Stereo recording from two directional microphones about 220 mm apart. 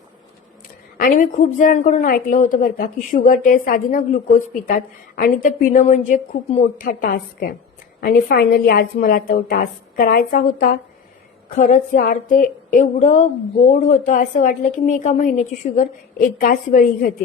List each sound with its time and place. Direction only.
0.9 s a woman's voice: 40° left (ahead or behind)